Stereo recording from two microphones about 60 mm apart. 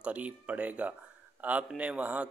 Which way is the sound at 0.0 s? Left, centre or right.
Right.